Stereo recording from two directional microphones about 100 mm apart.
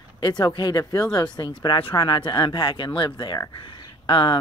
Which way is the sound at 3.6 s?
55° left (ahead or behind).